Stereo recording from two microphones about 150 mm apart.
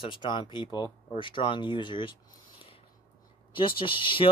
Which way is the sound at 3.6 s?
35° left (ahead or behind).